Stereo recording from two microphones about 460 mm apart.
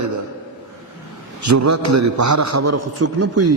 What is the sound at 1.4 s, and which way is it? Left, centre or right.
A man's voice, right.